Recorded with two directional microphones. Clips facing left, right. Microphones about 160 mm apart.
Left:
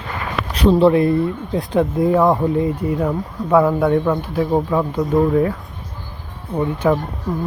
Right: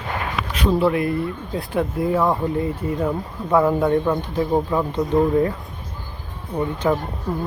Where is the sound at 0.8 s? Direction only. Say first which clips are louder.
Left 7 dB; 30° left (ahead or behind); by 3.1 s 10° left (ahead or behind).